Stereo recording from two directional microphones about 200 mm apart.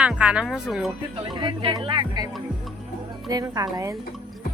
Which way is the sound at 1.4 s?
25° right (ahead or behind).